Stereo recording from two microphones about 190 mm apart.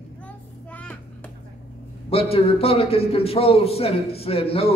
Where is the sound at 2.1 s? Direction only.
30° left (ahead or behind).